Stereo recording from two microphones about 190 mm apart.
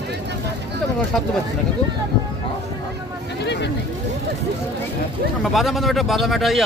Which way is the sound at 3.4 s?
65° left (ahead or behind).